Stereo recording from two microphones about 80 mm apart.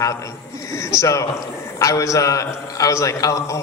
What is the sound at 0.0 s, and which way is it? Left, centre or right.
A man's voice, left.